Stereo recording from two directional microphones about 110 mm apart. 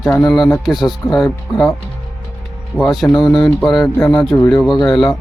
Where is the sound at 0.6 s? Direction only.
Centre (ahead or behind).